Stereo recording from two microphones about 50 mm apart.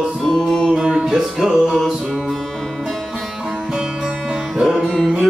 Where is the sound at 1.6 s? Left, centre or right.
Centre.